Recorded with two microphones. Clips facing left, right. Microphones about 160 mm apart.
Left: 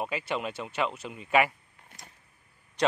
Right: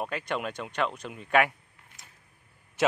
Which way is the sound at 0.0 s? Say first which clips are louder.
Even; 5° left (ahead or behind).